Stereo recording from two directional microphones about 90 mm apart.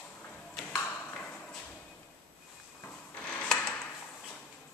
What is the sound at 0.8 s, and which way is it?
Ping, 15° left (ahead or behind).